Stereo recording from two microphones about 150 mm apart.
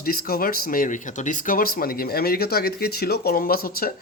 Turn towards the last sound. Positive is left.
turn(degrees=80)